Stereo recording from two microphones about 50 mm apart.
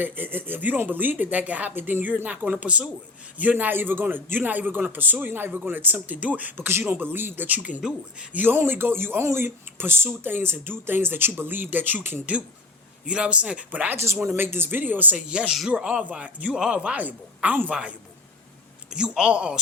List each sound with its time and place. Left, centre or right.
0.0 s speech: right
6.7 s speech: right
7.4 s speech: right
7.8 s speech: centre
8.4 s speech: right
13.1 s speech: right
13.9 s speech: right
14.3 s speech: right
15.1 s speech: right
16.6 s speech: centre
17.0 s speech: right
18.9 s speech: centre